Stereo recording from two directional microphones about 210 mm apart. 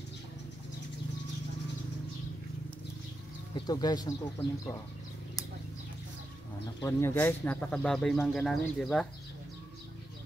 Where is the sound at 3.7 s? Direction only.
20° left (ahead or behind).